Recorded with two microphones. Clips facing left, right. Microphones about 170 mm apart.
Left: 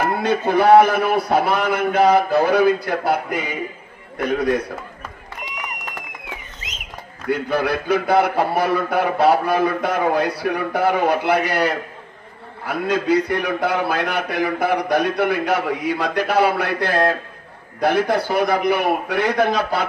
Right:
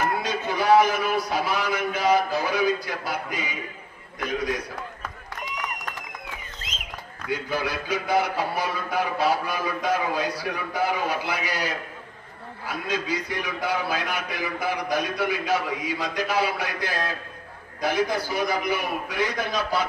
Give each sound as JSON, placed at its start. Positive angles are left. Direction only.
{"t": 0.2, "sound": "a man's voice", "side_deg": 60}
{"t": 7.2, "sound": "a man's voice", "side_deg": 60}